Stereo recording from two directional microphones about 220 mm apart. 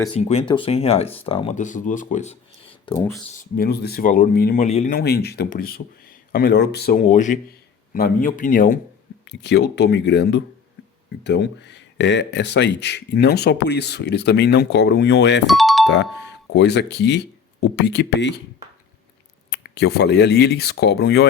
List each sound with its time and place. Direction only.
0.0 s speech: 25° left (ahead or behind)
3.6 s speech: 45° left (ahead or behind)
4.9 s speech: 45° left (ahead or behind)
7.0 s speech: 35° left (ahead or behind)
9.4 s speech: 50° left (ahead or behind)
15.4 s music: centre (ahead or behind)
16.5 s speech: 50° left (ahead or behind)
19.5 s speech: 50° left (ahead or behind)